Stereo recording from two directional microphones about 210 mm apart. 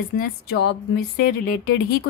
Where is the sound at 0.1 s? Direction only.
55° left (ahead or behind).